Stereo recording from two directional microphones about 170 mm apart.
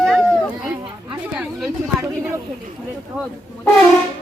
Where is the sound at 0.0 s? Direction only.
Centre (ahead or behind).